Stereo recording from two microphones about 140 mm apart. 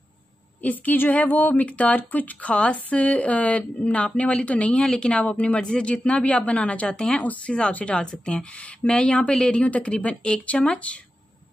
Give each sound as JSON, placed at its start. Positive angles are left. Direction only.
{"t": 0.6, "sound": "speech", "side_deg": 10}